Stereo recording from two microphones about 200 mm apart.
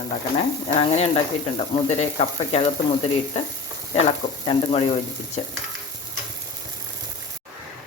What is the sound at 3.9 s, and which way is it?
Sizzle, 30° left (ahead or behind).